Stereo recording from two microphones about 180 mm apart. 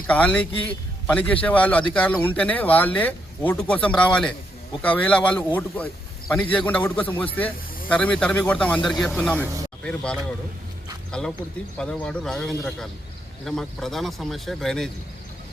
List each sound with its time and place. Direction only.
0.1 s a man's voice: 5° left (ahead or behind)
9.3 s speech: 15° right (ahead or behind)
9.8 s speech: 5° left (ahead or behind)